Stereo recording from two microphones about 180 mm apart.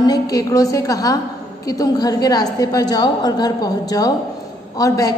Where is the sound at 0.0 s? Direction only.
20° left (ahead or behind).